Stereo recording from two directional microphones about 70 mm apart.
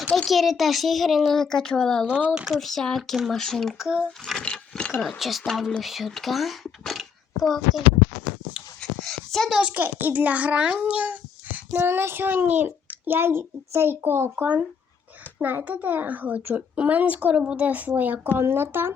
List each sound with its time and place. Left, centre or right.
0.3 s a child's voice: centre
2.0 s a child's voice: centre
2.6 s a child's voice: centre
3.8 s a child's voice: centre
4.4 s speech: centre
4.9 s a child's voice: centre
8.8 s a sound: centre
9.6 s a child's voice: centre